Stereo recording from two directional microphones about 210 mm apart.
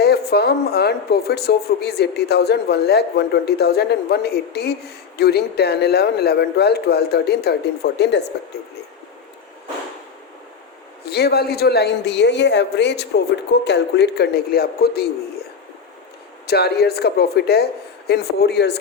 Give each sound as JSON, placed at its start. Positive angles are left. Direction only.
{"t": 0.0, "sound": "speech", "side_deg": 50}
{"t": 11.0, "sound": "speech", "side_deg": 50}
{"t": 16.5, "sound": "speech", "side_deg": 50}